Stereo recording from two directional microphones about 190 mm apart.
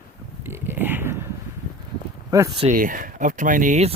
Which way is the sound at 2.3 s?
20° right (ahead or behind).